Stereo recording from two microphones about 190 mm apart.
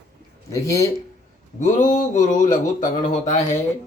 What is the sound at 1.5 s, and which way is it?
Speech, 40° left (ahead or behind).